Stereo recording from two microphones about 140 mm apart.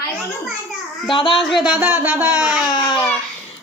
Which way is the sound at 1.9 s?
15° right (ahead or behind).